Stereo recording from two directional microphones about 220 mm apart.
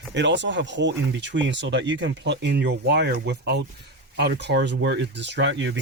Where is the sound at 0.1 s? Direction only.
55° right (ahead or behind).